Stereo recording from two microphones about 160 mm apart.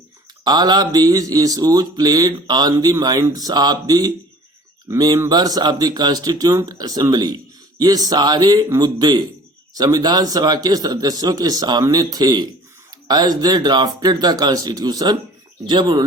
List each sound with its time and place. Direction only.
0.4 s speech: 25° right (ahead or behind)